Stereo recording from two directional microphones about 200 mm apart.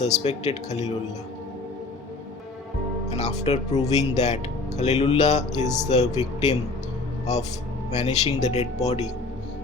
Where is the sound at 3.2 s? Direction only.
35° left (ahead or behind).